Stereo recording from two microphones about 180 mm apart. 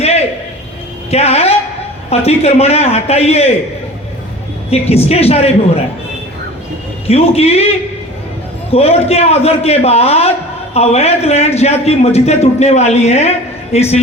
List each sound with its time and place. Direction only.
0.0 s a sound: 35° left (ahead or behind)
1.1 s a man's voice: 35° left (ahead or behind)
4.7 s a man's voice: 35° left (ahead or behind)
7.1 s a man's voice: 35° left (ahead or behind)
8.7 s a man's voice: 35° left (ahead or behind)